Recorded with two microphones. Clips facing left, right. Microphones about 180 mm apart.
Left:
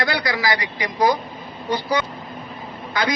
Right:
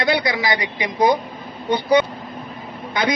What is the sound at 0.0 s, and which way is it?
A man's voice, 20° right (ahead or behind).